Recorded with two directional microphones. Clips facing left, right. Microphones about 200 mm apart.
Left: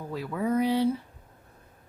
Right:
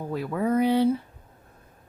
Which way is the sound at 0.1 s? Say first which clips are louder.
Right 3 dB; 55° right (ahead or behind).